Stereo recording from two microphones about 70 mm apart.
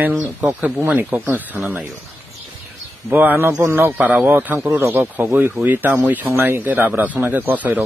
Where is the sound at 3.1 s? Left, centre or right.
Right.